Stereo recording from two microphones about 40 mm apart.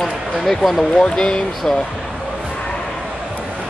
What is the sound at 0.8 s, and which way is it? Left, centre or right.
Speech, left.